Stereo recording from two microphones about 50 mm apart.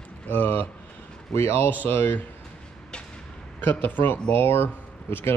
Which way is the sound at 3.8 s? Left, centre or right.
Left.